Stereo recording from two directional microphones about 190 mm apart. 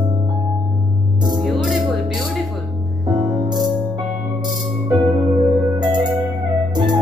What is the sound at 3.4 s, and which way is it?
Music, 20° right (ahead or behind).